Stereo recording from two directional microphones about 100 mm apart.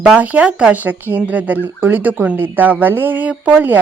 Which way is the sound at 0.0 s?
10° right (ahead or behind).